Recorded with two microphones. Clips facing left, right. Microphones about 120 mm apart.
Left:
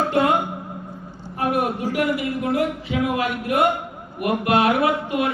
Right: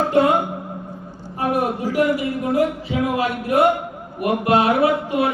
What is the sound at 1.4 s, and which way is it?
Speech, 35° right (ahead or behind).